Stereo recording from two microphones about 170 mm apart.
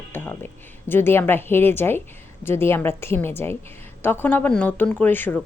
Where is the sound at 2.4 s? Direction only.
15° left (ahead or behind).